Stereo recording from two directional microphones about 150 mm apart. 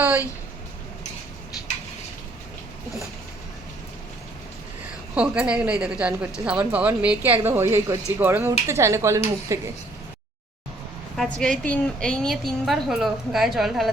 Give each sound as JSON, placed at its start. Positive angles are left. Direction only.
{"t": 5.1, "sound": "speech", "side_deg": -10}
{"t": 11.2, "sound": "a woman's voice", "side_deg": 5}